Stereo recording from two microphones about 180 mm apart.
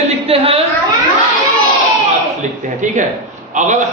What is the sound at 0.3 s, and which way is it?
Speech, 30° right (ahead or behind).